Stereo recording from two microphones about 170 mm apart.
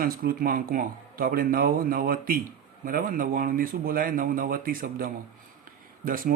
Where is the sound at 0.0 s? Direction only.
60° right (ahead or behind).